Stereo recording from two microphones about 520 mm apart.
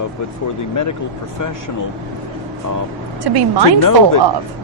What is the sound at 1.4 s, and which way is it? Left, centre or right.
Speech, left.